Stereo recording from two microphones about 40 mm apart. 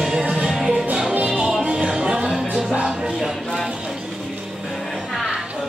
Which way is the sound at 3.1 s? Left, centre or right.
Centre.